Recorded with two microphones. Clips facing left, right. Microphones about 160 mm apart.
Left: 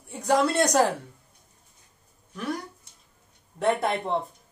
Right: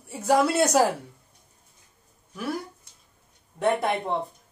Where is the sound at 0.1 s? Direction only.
5° right (ahead or behind).